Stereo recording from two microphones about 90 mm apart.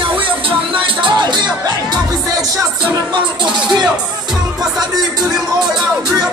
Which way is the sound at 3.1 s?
60° right (ahead or behind).